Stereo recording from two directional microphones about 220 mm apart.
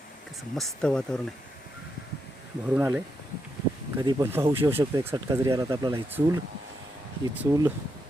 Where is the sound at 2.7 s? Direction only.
10° right (ahead or behind).